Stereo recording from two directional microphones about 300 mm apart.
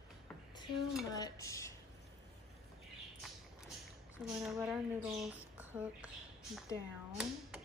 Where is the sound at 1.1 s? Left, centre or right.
Centre.